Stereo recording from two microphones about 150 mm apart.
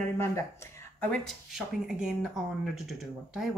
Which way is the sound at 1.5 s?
5° right (ahead or behind).